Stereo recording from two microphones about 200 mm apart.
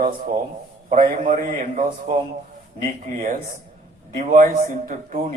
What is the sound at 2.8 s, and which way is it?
A man's voice, 40° right (ahead or behind).